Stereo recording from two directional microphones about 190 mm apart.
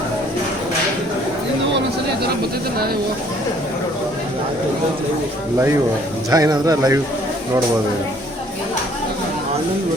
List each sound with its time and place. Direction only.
6.3 s speech: 20° right (ahead or behind)